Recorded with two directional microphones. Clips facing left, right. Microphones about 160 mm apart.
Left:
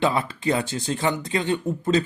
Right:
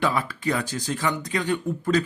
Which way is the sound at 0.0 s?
25° left (ahead or behind).